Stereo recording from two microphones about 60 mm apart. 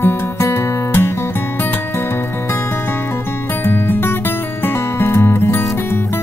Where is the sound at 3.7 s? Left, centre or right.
Left.